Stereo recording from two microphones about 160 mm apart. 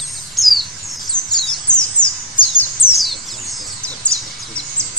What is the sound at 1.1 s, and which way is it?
Bird vocalization, 5° left (ahead or behind).